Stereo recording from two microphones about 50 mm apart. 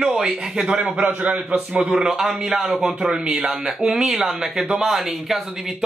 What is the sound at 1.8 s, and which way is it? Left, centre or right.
A man's voice, centre.